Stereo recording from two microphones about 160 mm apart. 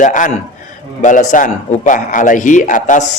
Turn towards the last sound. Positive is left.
turn(degrees=55)  # may be behind; listen again after turning